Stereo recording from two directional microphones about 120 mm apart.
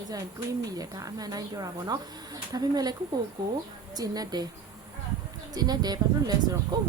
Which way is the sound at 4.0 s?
30° right (ahead or behind).